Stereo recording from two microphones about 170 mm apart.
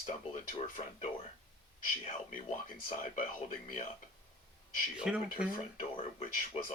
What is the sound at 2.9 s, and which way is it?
Speech, 50° left (ahead or behind).